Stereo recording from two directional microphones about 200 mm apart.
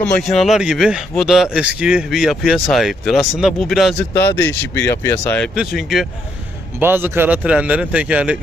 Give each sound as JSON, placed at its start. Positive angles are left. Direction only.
{"t": 0.0, "sound": "speech", "side_deg": 5}
{"t": 5.5, "sound": "speech", "side_deg": 0}